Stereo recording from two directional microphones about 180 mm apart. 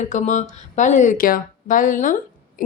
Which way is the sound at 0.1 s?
45° left (ahead or behind).